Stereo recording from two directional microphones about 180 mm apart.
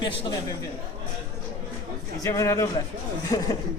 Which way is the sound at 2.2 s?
15° left (ahead or behind).